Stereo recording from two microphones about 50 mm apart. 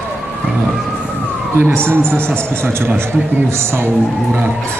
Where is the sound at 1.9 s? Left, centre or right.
Right.